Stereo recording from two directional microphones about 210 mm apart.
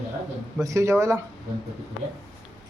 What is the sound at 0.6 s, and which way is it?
Speech, 15° right (ahead or behind).